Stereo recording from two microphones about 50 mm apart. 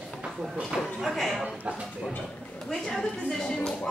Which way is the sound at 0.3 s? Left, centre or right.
Centre.